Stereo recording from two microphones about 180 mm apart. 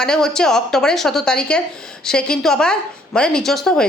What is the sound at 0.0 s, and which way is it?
A woman's voice, 5° left (ahead or behind).